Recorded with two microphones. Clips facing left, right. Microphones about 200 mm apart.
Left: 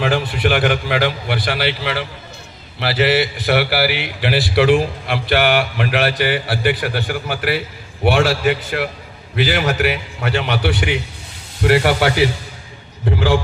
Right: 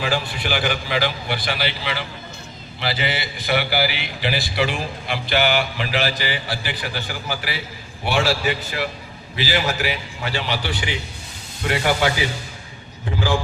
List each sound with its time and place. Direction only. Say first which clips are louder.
0.0 s a man's voice: left 6 dB; 60° left (ahead or behind)